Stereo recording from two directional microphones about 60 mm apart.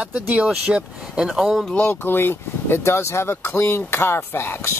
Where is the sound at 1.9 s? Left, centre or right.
Left.